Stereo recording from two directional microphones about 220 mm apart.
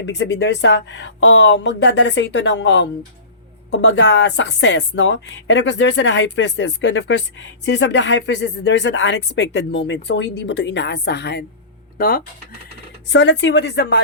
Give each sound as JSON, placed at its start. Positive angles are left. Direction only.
{"t": 0.0, "sound": "speech", "side_deg": 50}
{"t": 13.1, "sound": "speech", "side_deg": 55}